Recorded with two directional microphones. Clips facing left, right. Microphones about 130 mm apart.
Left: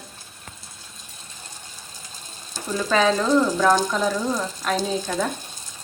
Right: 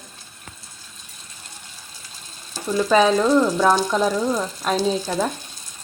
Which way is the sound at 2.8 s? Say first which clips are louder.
Right 3 dB; 15° right (ahead or behind).